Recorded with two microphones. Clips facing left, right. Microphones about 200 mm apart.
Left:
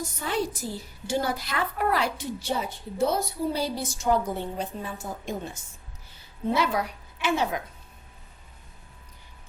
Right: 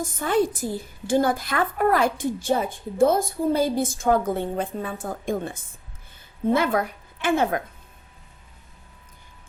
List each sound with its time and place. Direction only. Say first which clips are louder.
0.0 s a woman's voice: right 7 dB; 50° right (ahead or behind)